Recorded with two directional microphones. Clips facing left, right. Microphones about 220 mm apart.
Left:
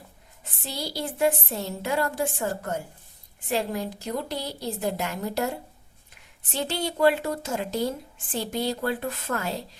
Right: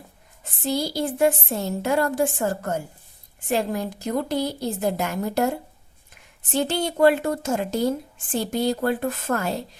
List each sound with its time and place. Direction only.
0.6 s a woman's voice: 45° right (ahead or behind)